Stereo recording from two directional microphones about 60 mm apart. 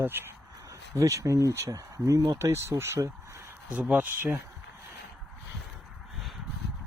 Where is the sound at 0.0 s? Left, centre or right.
Right.